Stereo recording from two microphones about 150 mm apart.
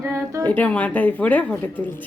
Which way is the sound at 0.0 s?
20° right (ahead or behind).